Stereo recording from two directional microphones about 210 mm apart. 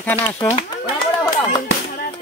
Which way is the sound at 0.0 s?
10° left (ahead or behind).